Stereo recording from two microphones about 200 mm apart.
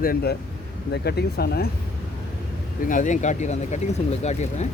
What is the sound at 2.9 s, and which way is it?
Speech, 40° left (ahead or behind).